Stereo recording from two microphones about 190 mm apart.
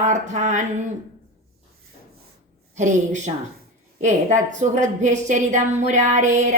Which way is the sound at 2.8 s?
40° right (ahead or behind).